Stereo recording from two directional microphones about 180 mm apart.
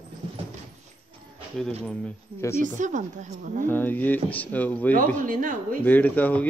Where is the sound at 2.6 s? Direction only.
45° right (ahead or behind).